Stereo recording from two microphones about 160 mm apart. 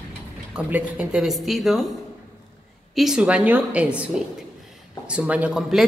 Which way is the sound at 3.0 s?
5° right (ahead or behind).